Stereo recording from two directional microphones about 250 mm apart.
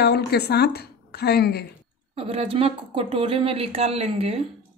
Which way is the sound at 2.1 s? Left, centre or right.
Right.